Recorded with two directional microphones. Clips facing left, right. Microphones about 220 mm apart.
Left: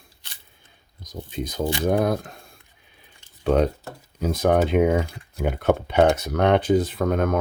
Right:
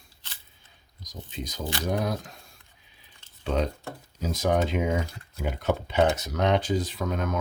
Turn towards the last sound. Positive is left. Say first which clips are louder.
# left 7 dB
turn(degrees=55)  # may be behind; listen again after turning